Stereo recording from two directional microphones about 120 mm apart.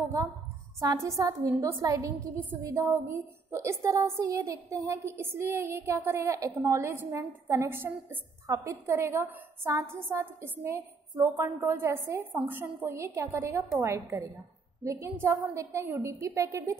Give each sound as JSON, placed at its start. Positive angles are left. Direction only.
{"t": 0.2, "sound": "a woman's voice", "side_deg": -30}